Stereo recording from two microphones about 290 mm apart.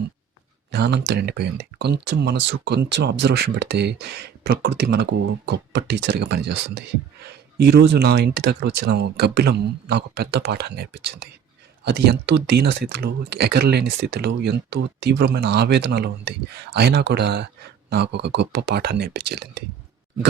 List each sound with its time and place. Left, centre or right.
0.7 s speech: right